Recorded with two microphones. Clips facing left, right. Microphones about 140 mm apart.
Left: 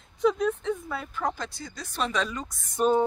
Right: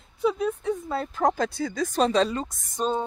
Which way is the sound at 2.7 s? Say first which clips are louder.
Left 4 dB; 10° left (ahead or behind).